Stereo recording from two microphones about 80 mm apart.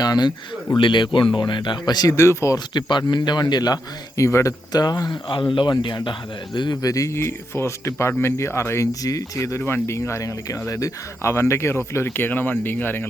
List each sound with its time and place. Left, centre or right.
0.0 s speech: left
0.8 s speech: left
1.4 s speech: left
1.9 s speech: left
2.1 s speech: left
3.1 s speech: left
4.2 s speech: left
4.7 s speech: left
5.3 s speech: left
5.7 s speech: left
6.8 s speech: left
9.6 s speech: left